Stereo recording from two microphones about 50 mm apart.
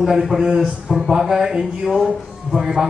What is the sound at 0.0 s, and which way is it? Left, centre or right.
A man's voice, centre.